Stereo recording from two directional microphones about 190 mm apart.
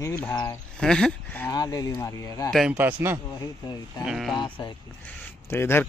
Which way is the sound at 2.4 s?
Centre (ahead or behind).